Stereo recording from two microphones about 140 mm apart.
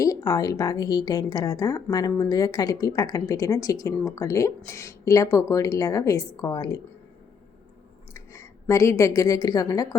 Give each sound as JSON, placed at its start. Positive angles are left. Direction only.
{"t": 0.0, "sound": "a woman's voice", "side_deg": 25}
{"t": 8.1, "sound": "a woman's voice", "side_deg": 20}